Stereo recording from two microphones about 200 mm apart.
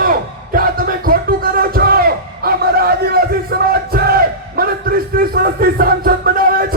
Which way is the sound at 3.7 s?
50° right (ahead or behind).